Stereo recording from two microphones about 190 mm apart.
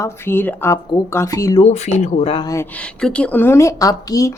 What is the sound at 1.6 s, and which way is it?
Speech, 35° left (ahead or behind).